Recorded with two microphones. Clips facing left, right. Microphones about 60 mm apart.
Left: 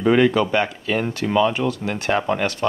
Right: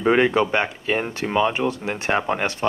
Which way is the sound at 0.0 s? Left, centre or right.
Right.